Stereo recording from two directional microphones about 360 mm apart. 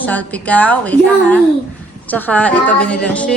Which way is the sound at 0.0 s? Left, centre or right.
Centre.